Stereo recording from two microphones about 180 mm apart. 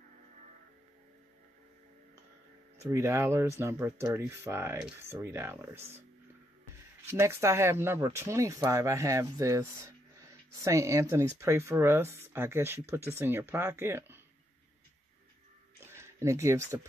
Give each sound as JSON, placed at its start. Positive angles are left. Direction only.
{"t": 2.8, "sound": "speech", "side_deg": -15}
{"t": 7.1, "sound": "speech", "side_deg": -15}
{"t": 15.9, "sound": "speech", "side_deg": -15}